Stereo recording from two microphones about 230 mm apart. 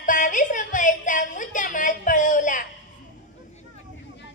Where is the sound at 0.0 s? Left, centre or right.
Left.